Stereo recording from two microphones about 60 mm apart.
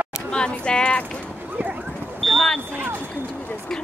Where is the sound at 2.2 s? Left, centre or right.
Centre.